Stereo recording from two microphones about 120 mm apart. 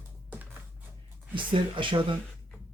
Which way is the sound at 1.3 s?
45° right (ahead or behind).